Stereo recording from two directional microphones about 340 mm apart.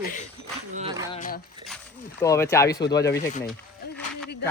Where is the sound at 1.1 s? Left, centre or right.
Left.